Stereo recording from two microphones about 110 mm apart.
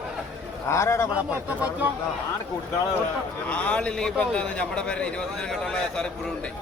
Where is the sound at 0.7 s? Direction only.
25° left (ahead or behind).